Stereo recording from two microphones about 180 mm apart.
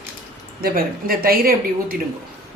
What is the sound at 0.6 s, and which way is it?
A woman's voice, 55° right (ahead or behind).